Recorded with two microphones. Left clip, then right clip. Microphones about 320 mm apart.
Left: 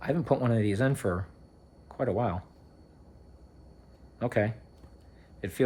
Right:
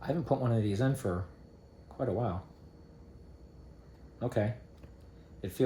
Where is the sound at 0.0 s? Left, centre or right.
Left.